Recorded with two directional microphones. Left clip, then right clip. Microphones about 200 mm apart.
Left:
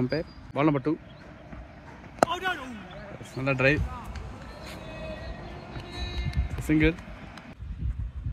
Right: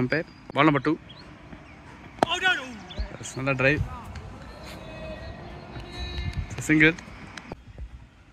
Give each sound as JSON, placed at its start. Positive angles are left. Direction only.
{"t": 0.0, "sound": "speech", "side_deg": 0}
{"t": 2.2, "sound": "basketball bounce", "side_deg": 65}
{"t": 3.3, "sound": "speech", "side_deg": 0}
{"t": 6.7, "sound": "speech", "side_deg": 0}